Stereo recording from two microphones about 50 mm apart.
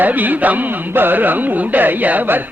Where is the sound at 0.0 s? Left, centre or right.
Right.